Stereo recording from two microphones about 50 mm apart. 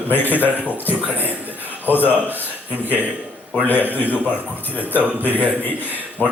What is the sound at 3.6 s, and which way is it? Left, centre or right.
Speech, left.